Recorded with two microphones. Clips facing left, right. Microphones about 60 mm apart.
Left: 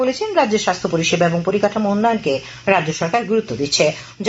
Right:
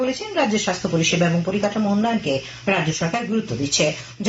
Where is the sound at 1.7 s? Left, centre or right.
Left.